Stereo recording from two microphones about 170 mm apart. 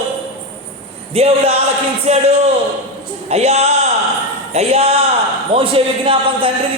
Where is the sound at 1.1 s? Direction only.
35° right (ahead or behind).